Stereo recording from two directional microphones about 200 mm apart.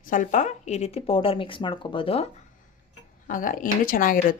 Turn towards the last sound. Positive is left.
turn(degrees=45)  # may be behind; listen again after turning